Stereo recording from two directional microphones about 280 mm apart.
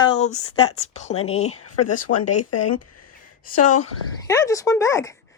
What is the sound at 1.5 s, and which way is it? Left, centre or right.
Speech, left.